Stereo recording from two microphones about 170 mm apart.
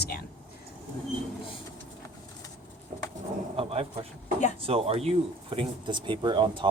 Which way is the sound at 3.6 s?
35° right (ahead or behind).